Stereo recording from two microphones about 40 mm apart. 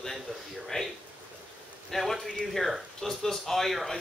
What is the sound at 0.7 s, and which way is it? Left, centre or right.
Speech, centre.